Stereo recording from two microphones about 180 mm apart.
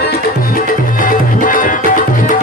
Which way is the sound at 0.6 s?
50° left (ahead or behind).